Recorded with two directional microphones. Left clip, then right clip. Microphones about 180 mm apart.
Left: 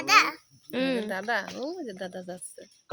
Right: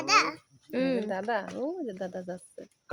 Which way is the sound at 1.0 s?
30° right (ahead or behind).